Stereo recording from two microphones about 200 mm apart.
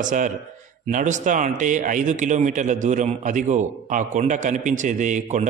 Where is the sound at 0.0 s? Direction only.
40° right (ahead or behind).